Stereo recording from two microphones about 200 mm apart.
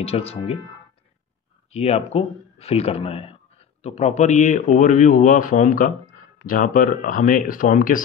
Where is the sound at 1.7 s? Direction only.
30° left (ahead or behind).